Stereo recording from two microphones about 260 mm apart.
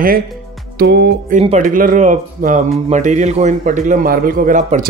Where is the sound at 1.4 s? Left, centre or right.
Right.